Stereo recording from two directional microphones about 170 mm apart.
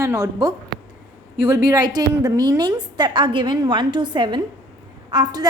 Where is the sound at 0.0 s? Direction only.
20° right (ahead or behind).